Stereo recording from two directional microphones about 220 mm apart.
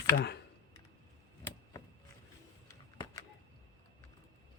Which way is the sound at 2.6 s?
15° left (ahead or behind).